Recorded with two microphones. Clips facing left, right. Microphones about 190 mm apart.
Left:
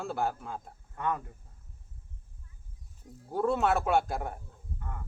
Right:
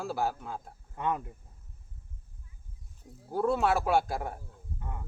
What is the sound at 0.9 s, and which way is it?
Speech, 20° right (ahead or behind).